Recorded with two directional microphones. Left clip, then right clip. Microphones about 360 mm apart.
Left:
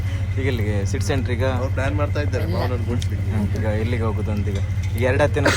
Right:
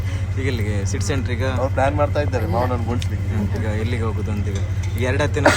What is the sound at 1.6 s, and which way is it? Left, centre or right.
Speech, right.